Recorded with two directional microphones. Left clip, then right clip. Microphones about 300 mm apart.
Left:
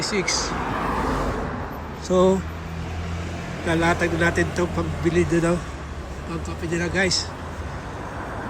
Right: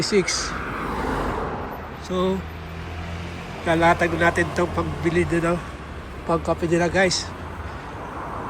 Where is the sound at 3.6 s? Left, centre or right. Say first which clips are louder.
Right 3 dB; centre.